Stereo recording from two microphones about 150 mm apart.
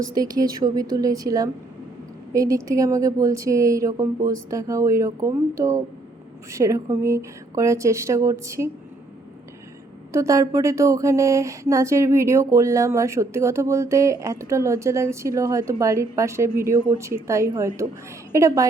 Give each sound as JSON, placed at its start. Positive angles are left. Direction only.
{"t": 0.1, "sound": "speech", "side_deg": -25}
{"t": 10.1, "sound": "speech", "side_deg": -20}